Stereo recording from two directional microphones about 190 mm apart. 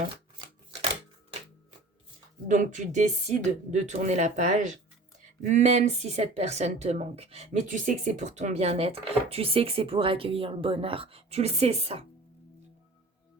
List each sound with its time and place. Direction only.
2.5 s speech: 40° right (ahead or behind)